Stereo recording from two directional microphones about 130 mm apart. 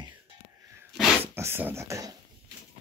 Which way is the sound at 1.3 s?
20° right (ahead or behind).